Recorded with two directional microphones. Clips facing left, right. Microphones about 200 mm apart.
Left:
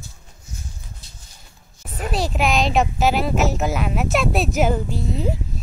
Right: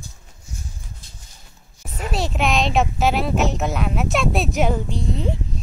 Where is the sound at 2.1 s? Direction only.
Centre (ahead or behind).